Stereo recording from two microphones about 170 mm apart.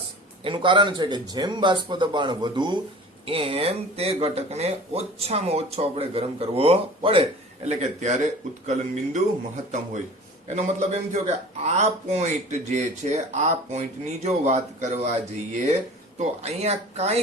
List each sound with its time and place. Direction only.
0.4 s speech: 30° right (ahead or behind)
10.5 s a man's voice: 45° right (ahead or behind)
16.1 s speech: 40° right (ahead or behind)